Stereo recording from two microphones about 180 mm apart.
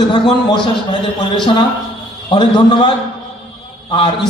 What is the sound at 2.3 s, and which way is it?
Speech, 25° left (ahead or behind).